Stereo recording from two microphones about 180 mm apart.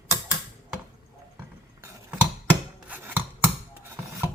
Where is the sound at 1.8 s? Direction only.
10° right (ahead or behind).